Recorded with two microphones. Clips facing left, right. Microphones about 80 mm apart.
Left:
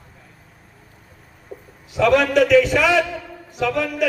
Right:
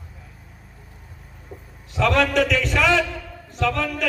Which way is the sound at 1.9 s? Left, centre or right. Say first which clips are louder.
Left 3 dB; centre.